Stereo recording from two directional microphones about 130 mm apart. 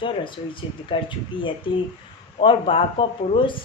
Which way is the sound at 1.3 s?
40° left (ahead or behind).